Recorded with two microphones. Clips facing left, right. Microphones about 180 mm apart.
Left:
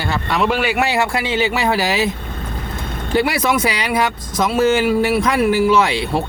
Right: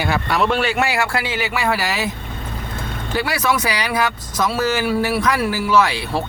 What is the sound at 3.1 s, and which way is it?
Speech, 20° left (ahead or behind).